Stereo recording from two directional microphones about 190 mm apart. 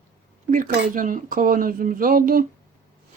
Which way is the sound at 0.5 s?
45° right (ahead or behind).